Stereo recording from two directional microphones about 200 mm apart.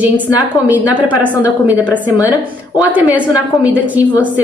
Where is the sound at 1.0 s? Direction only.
5° right (ahead or behind).